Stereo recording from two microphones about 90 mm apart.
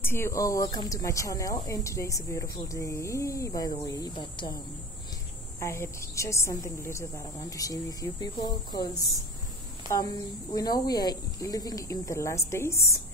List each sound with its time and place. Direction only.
0.0 s a woman's voice: 30° left (ahead or behind)
4.2 s speech: 60° left (ahead or behind)
5.6 s a woman's voice: 35° left (ahead or behind)
9.8 s a woman's voice: 40° left (ahead or behind)